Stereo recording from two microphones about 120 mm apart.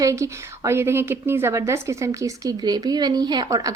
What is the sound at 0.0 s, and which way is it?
A woman's voice, 25° right (ahead or behind).